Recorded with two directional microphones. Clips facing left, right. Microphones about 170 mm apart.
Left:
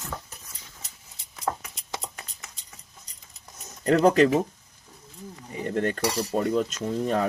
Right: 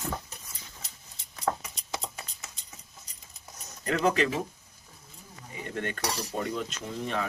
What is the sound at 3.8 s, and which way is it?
Speech, 40° left (ahead or behind).